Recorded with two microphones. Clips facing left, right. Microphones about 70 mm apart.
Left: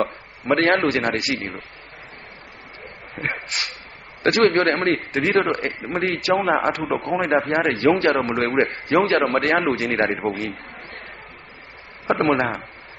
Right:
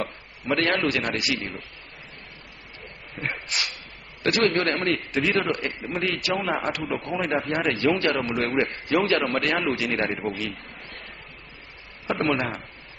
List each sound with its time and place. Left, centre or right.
0.0 s a man's voice: left
3.2 s dog: left
4.2 s speech: left
12.3 s speech: left